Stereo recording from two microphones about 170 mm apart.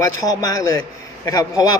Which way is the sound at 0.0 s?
20° left (ahead or behind).